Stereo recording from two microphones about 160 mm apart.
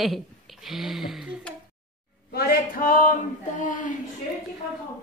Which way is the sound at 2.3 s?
65° left (ahead or behind).